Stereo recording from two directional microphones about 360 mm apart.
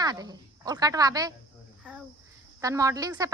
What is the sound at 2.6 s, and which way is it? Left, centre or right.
Speech, centre.